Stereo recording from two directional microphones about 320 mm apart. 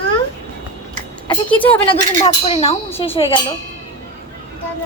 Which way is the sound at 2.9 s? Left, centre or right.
Centre.